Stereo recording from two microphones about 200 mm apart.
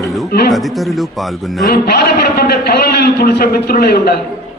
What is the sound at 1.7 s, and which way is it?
A man's voice, 50° left (ahead or behind).